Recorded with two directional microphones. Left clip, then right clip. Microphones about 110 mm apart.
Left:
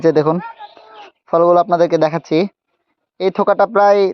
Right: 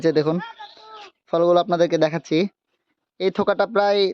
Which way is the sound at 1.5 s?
35° right (ahead or behind).